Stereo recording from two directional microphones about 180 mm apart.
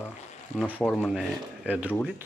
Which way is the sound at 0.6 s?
10° right (ahead or behind).